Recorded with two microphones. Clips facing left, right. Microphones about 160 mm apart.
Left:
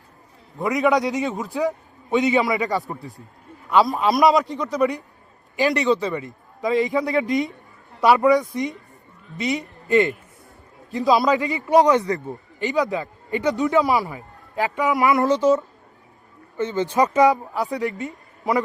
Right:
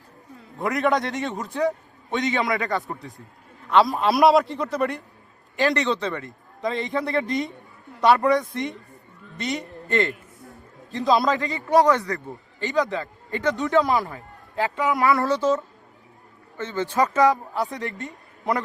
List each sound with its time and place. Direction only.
0.6 s a man's voice: centre (ahead or behind)
11.3 s a man's voice: 15° left (ahead or behind)
14.2 s a man's voice: 15° left (ahead or behind)
17.5 s speech: 5° left (ahead or behind)